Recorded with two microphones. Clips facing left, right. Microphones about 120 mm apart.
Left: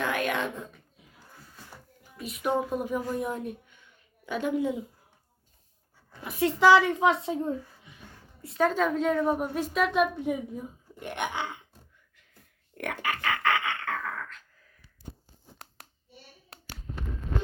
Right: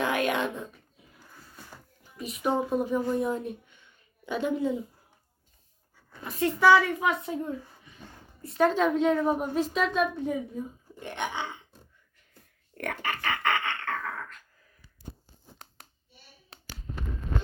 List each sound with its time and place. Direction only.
0.3 s a child's voice: 5° right (ahead or behind)
2.1 s a woman's voice: centre (ahead or behind)
4.4 s speech: 5° left (ahead or behind)
6.1 s speech: 10° left (ahead or behind)
8.4 s a woman's voice: centre (ahead or behind)
12.7 s dog: 5° left (ahead or behind)